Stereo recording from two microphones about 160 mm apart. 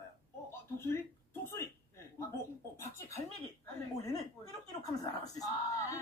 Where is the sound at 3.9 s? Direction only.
20° left (ahead or behind).